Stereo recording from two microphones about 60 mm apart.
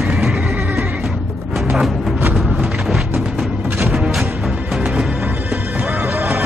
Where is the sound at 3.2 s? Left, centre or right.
Centre.